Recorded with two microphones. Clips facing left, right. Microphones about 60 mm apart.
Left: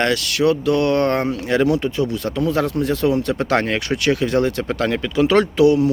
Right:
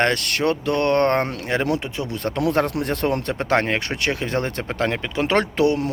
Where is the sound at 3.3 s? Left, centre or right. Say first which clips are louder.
Left 1 dB; right.